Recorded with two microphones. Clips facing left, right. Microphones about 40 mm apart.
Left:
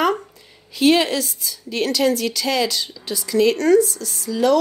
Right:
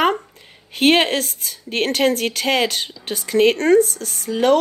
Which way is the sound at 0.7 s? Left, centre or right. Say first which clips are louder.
Right 1 dB; right.